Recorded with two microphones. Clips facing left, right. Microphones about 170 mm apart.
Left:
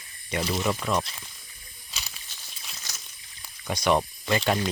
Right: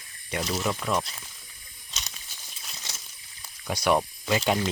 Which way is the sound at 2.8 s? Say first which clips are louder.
Right 2 dB; 25° right (ahead or behind).